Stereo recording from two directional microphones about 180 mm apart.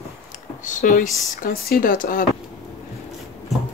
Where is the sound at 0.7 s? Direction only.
45° left (ahead or behind).